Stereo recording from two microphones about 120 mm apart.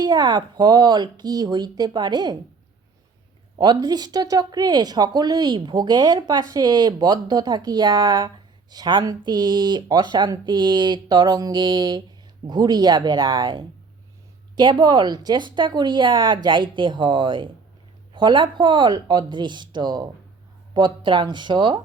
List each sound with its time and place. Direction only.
0.0 s speech: 35° right (ahead or behind)
3.6 s speech: 35° right (ahead or behind)